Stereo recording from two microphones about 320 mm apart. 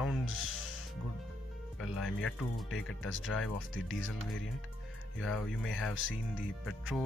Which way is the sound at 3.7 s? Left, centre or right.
Left.